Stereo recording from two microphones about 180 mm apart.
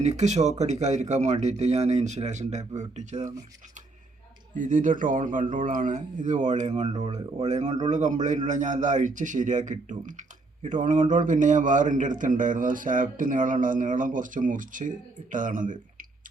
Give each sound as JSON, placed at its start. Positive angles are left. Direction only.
{"t": 0.0, "sound": "speech", "side_deg": -40}
{"t": 4.5, "sound": "a man's voice", "side_deg": -45}